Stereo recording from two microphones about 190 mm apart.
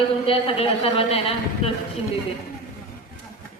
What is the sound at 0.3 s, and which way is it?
A woman's voice, 30° left (ahead or behind).